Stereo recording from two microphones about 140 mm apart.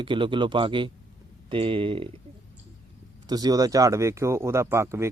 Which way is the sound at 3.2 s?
30° right (ahead or behind).